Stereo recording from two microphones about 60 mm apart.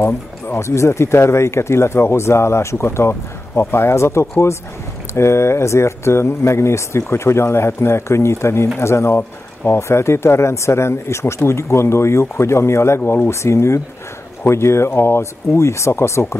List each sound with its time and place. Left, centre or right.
0.0 s speech: left
13.0 s speech: left
13.3 s speech: left